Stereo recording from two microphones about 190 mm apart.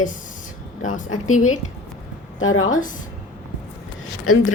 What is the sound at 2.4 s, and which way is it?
Speech, 90° left.